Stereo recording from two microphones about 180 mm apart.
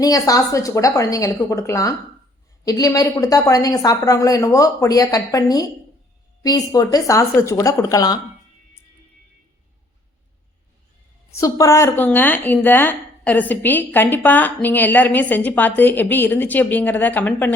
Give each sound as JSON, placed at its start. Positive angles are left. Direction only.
{"t": 0.0, "sound": "a woman's voice", "side_deg": 20}
{"t": 11.3, "sound": "speech", "side_deg": 20}